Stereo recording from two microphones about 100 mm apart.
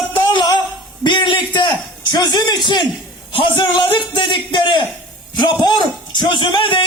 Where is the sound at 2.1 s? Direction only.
45° left (ahead or behind).